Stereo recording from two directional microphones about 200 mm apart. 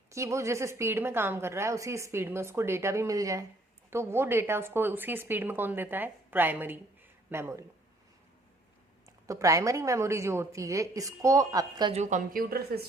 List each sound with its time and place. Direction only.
0.1 s a woman's voice: 15° right (ahead or behind)
9.2 s a woman's voice: 15° right (ahead or behind)
12.3 s a woman's voice: 45° right (ahead or behind)